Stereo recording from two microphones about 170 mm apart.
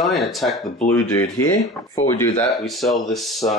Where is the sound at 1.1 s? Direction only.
25° left (ahead or behind).